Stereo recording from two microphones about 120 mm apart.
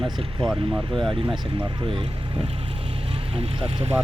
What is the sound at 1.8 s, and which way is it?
Speech, 45° right (ahead or behind).